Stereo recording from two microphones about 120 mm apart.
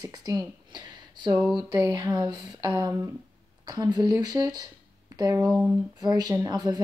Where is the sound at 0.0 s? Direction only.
35° right (ahead or behind).